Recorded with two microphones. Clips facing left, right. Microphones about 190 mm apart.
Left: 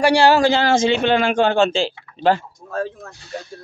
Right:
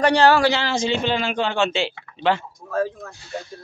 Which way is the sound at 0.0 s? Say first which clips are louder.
Left 2 dB; 10° left (ahead or behind).